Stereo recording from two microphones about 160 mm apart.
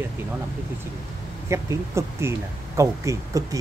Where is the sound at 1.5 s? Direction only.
15° right (ahead or behind).